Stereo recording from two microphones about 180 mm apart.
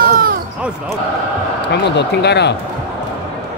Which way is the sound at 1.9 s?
70° left (ahead or behind).